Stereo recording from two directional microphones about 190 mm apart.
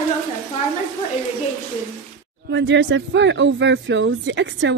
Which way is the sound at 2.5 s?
70° right (ahead or behind).